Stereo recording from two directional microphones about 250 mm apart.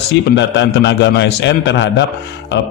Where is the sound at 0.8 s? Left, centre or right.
Left.